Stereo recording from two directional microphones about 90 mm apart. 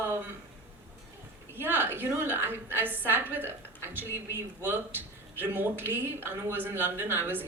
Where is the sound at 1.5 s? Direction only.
25° right (ahead or behind).